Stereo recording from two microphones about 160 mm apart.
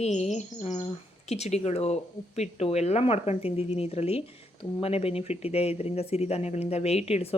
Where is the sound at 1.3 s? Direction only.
40° left (ahead or behind).